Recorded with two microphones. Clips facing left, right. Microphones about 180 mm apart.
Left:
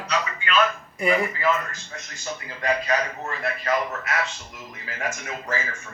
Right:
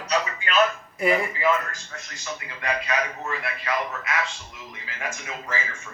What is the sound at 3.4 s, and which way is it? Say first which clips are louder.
Speech: left 6 dB; 45° left (ahead or behind).